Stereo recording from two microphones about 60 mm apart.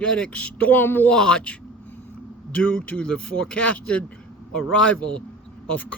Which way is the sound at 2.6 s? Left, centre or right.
Left.